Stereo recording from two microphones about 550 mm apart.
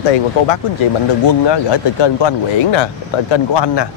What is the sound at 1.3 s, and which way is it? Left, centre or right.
Speech, left.